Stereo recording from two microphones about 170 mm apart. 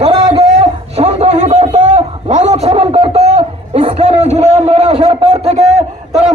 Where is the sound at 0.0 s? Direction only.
35° right (ahead or behind).